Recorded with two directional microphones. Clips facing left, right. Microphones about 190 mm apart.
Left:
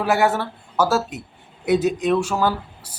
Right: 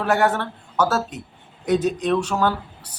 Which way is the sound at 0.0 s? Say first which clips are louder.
Left 1 dB; 10° left (ahead or behind).